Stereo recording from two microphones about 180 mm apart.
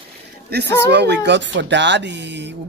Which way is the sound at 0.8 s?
70° right (ahead or behind).